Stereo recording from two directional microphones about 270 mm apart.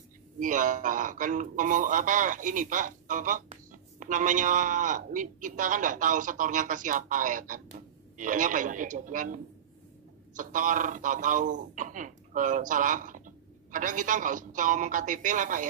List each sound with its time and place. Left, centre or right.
0.4 s a man's voice: right